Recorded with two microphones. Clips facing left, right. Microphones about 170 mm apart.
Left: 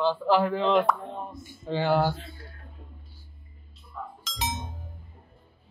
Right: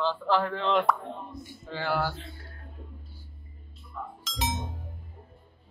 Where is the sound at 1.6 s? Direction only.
20° left (ahead or behind).